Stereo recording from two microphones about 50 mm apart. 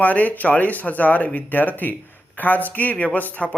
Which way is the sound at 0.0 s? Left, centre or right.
Left.